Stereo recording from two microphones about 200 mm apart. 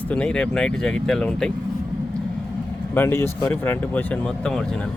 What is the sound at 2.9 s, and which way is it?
Speech, 10° left (ahead or behind).